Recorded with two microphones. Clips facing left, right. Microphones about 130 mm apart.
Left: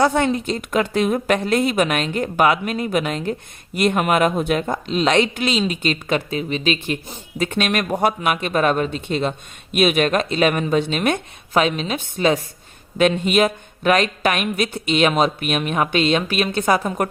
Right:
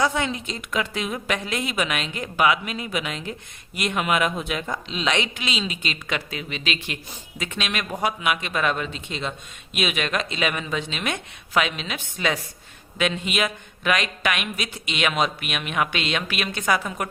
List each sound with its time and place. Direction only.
0.0 s a woman's voice: 50° left (ahead or behind); by 6.7 s 35° left (ahead or behind)
6.7 s a woman's voice: 50° left (ahead or behind)